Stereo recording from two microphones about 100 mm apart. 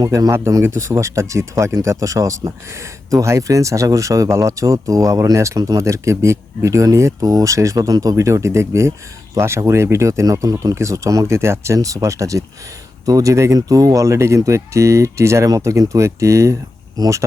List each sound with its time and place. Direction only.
0.0 s speech: 35° right (ahead or behind)
0.3 s speech: 25° right (ahead or behind)